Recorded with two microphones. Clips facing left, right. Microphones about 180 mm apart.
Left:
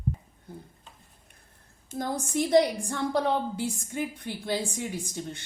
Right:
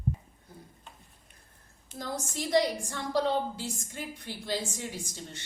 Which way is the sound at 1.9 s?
50° left (ahead or behind).